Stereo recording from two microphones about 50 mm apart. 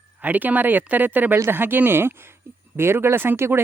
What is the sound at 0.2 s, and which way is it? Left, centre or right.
Speech, right.